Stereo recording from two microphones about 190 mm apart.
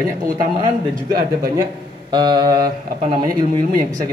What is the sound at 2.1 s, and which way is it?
Speech, 20° right (ahead or behind).